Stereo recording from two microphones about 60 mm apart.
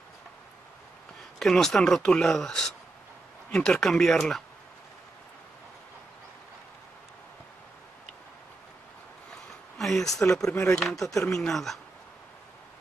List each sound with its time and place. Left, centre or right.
1.4 s speech: centre
9.8 s speech: centre
10.5 s speech: left
10.8 s speech: centre